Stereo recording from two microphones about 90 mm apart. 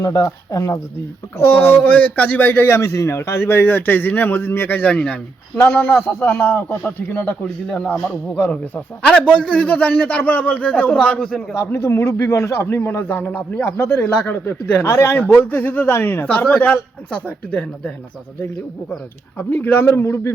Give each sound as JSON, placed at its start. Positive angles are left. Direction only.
{"t": 0.0, "sound": "speech", "side_deg": 40}
{"t": 1.4, "sound": "a man's voice", "side_deg": 25}
{"t": 11.5, "sound": "a man's voice", "side_deg": 35}
{"t": 14.0, "sound": "a man's voice", "side_deg": 15}
{"t": 19.4, "sound": "a man's voice", "side_deg": 20}